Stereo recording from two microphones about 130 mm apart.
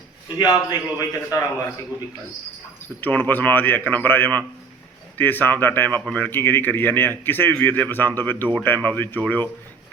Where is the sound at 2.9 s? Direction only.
15° left (ahead or behind).